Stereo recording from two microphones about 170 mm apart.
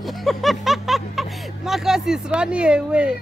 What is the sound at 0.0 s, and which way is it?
Music, centre (ahead or behind).